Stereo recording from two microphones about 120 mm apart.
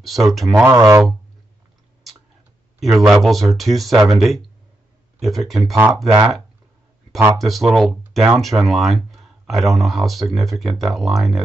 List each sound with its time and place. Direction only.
0.0 s speech: centre (ahead or behind)
0.7 s speech: 25° right (ahead or behind)
2.8 s speech: centre (ahead or behind)
7.3 s speech: centre (ahead or behind)